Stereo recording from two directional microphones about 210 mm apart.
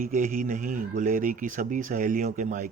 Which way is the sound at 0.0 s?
40° right (ahead or behind).